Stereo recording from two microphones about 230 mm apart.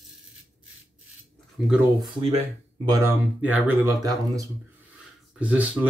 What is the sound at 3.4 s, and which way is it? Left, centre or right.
Speech, centre.